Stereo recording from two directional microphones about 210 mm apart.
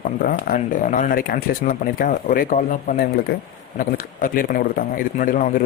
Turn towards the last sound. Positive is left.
turn(degrees=40)  # may be behind; listen again after turning